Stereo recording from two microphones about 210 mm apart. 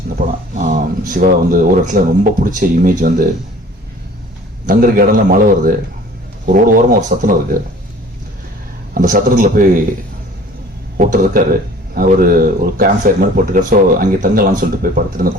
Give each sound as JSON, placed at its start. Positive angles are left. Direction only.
{"t": 0.6, "sound": "speech", "side_deg": -40}
{"t": 4.7, "sound": "a man's voice", "side_deg": -45}
{"t": 9.0, "sound": "speech", "side_deg": -40}
{"t": 10.9, "sound": "a man's voice", "side_deg": -40}